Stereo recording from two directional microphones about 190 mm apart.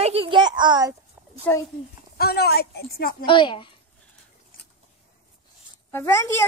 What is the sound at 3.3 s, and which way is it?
Speech, 25° left (ahead or behind).